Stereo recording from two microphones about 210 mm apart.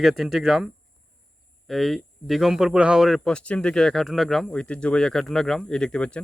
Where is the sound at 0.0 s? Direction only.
Centre (ahead or behind).